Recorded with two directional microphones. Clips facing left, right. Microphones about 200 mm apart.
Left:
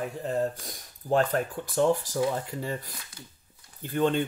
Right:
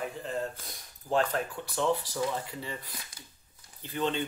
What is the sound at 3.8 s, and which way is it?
Speech, 50° left (ahead or behind).